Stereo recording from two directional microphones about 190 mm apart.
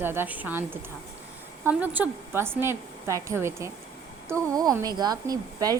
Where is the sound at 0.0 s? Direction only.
10° right (ahead or behind).